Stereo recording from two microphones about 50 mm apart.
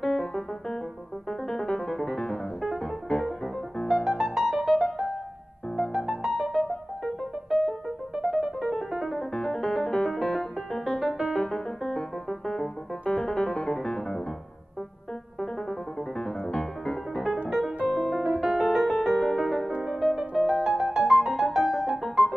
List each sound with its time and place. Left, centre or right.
0.0 s piano: centre
1.5 s music: centre
3.8 s music: centre
9.3 s music: centre
11.3 s piano: centre
13.1 s music: centre
16.2 s music: centre
17.5 s music: centre
17.8 s piano: centre
18.6 s music: centre